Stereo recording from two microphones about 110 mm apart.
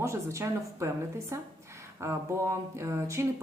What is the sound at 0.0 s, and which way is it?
Speech, 25° right (ahead or behind).